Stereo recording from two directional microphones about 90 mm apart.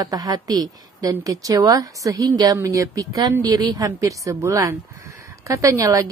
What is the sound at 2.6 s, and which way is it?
A woman's voice, 35° right (ahead or behind).